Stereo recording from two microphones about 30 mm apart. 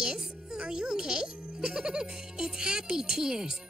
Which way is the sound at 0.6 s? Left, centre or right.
Right.